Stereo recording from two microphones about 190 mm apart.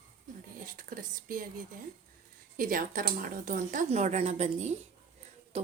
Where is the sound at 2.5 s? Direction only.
45° right (ahead or behind).